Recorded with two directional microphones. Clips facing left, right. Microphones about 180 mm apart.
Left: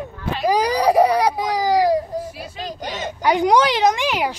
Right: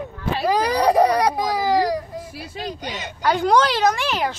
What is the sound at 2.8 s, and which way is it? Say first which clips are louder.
Speech: left 4 dB; 45° left (ahead or behind).